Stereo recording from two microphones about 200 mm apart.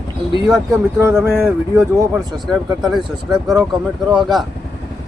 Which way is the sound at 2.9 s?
Centre (ahead or behind).